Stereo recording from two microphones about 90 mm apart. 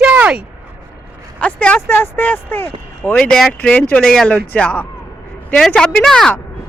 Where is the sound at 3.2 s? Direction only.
5° left (ahead or behind).